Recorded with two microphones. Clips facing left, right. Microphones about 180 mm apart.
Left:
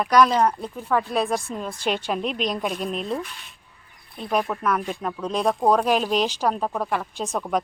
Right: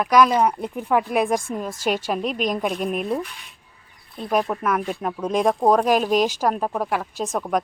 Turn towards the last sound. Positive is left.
turn(degrees=-5)  # may be behind; listen again after turning